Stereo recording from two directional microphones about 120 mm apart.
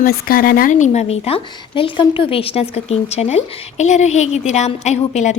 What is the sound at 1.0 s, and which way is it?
Speech, 55° left (ahead or behind).